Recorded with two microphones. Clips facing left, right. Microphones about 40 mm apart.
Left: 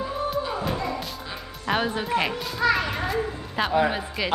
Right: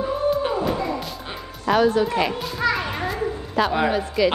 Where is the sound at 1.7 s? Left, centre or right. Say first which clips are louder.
Right 6 dB; left.